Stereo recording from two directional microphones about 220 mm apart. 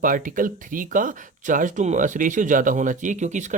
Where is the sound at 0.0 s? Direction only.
40° right (ahead or behind).